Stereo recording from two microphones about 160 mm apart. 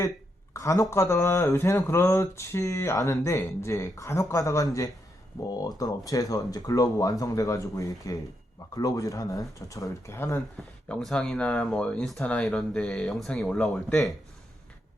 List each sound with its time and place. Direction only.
0.5 s speech: 20° left (ahead or behind)
10.6 s speech: 5° left (ahead or behind)